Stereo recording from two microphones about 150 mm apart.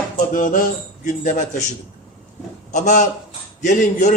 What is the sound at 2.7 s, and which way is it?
A man's voice, 55° left (ahead or behind).